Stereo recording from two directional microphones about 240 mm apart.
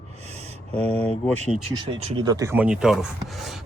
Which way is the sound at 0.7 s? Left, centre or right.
Centre.